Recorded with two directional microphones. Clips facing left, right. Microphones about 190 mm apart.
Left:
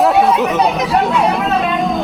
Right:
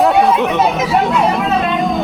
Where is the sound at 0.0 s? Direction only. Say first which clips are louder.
Even; centre (ahead or behind).